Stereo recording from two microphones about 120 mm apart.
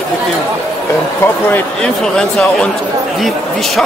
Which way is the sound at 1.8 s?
5° left (ahead or behind).